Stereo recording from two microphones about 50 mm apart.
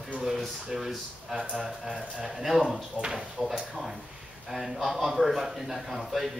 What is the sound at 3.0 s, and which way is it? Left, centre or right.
Speech, centre.